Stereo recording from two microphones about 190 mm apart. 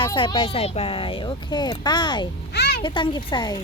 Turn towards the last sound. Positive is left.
turn(degrees=20)  # may be behind; listen again after turning